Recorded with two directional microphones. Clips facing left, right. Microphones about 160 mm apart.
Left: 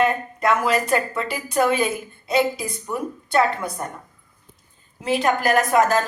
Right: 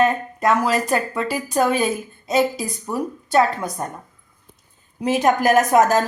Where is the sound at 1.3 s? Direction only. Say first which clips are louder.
Right 1 dB; 40° right (ahead or behind).